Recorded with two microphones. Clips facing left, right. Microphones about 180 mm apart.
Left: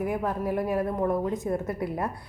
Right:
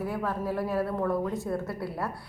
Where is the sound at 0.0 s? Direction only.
15° left (ahead or behind).